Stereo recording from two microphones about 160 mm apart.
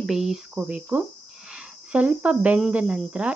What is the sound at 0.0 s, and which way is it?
Speech, 5° right (ahead or behind).